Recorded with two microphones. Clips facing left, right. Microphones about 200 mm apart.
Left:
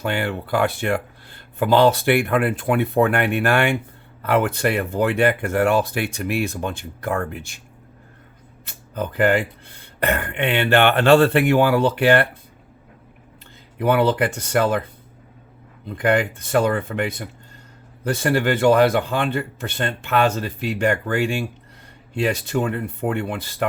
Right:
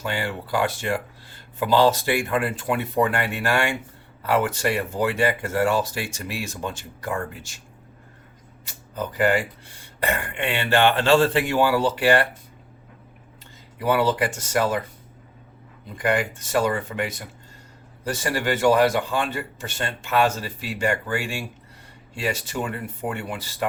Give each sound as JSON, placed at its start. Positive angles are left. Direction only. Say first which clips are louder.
{"t": 0.0, "sound": "speech", "louder": "left 4 dB", "side_deg": 60}
{"t": 9.7, "sound": "speech", "louder": "left 4 dB", "side_deg": 60}
{"t": 13.7, "sound": "speech", "louder": "left 3 dB", "side_deg": 60}
{"t": 16.0, "sound": "speech", "louder": "left 4 dB", "side_deg": 60}
{"t": 22.3, "sound": "speech", "louder": "left 3 dB", "side_deg": 60}